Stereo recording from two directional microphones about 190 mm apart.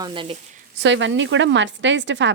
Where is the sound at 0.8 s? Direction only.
75° right (ahead or behind).